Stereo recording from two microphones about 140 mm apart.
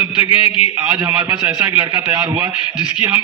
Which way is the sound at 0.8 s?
10° right (ahead or behind).